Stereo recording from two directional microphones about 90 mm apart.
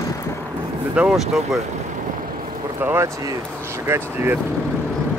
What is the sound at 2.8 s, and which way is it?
Speech, 25° right (ahead or behind).